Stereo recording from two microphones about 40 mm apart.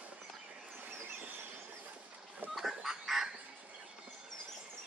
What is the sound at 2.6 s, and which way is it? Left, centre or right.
Goose, centre.